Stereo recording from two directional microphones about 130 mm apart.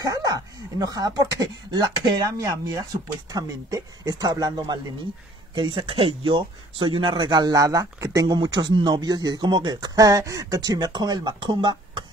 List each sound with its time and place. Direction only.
0.0 s speech: 25° right (ahead or behind)